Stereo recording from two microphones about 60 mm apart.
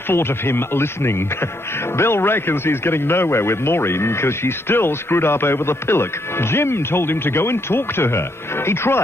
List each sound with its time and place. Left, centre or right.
0.1 s a man's voice: left